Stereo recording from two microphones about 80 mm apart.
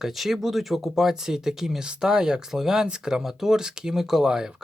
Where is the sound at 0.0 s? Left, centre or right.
Centre.